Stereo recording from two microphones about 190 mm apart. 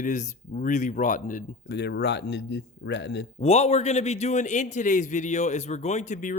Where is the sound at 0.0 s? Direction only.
40° left (ahead or behind); by 3.2 s 65° left (ahead or behind).